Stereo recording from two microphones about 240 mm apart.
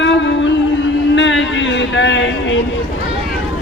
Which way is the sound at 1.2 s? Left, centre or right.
Left.